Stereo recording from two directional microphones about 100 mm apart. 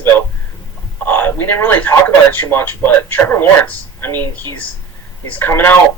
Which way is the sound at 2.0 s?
20° left (ahead or behind).